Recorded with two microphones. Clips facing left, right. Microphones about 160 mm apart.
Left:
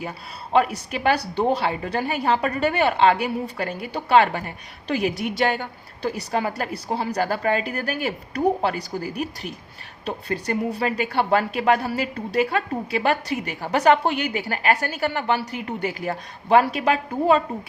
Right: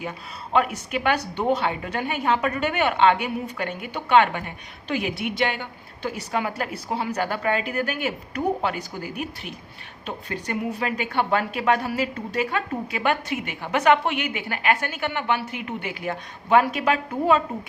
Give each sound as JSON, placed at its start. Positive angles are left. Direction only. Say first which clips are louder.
{"t": 0.5, "sound": "a woman's voice", "louder": "left 2 dB", "side_deg": 35}